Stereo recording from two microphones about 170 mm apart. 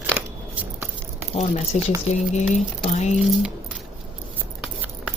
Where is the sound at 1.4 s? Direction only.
40° left (ahead or behind).